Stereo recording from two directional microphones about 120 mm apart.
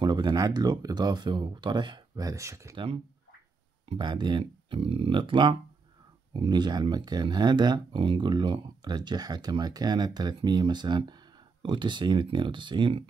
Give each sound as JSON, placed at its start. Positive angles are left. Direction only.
{"t": 0.0, "sound": "speech", "side_deg": -35}
{"t": 3.9, "sound": "speech", "side_deg": -40}